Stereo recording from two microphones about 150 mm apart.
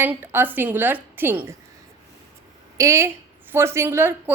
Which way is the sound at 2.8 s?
20° right (ahead or behind).